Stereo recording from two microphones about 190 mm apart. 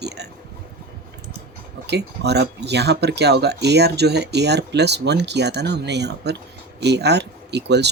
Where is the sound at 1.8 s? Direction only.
60° right (ahead or behind).